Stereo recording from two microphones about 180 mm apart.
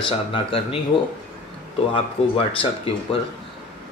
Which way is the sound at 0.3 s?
30° left (ahead or behind).